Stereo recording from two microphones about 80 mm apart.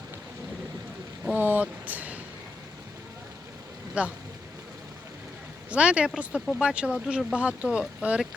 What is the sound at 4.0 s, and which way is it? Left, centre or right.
Speech, centre.